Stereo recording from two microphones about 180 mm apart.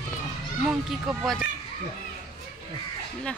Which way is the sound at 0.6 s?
Centre (ahead or behind).